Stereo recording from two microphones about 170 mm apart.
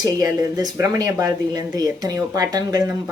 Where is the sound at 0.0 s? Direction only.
20° right (ahead or behind).